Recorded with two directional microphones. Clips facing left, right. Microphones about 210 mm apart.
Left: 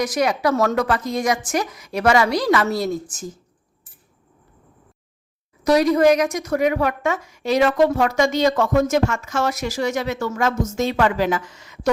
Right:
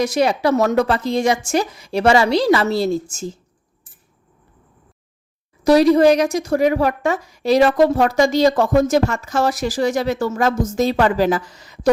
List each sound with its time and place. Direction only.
0.0 s a woman's voice: 30° right (ahead or behind)
5.6 s a woman's voice: 30° right (ahead or behind)